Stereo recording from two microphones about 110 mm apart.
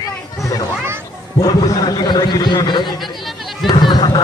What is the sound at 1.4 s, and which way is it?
A man's voice, 35° left (ahead or behind).